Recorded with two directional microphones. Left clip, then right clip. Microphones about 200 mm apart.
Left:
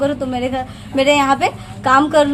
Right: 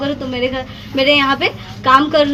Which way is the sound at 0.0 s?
20° left (ahead or behind).